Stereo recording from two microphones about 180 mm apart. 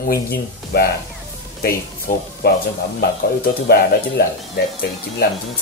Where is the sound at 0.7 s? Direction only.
60° left (ahead or behind).